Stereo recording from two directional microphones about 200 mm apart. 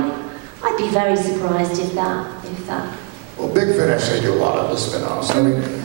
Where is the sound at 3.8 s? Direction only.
20° right (ahead or behind).